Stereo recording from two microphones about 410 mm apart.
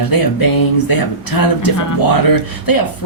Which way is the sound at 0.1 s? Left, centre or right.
Left.